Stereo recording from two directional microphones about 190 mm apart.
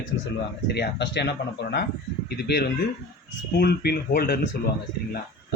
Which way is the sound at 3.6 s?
55° left (ahead or behind).